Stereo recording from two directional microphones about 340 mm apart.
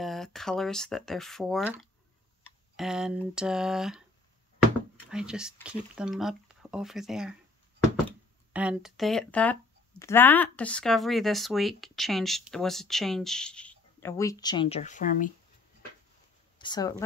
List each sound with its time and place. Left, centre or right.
0.0 s speech: centre
5.1 s speech: centre
8.5 s speech: centre; by 15.3 s left
16.5 s speech: centre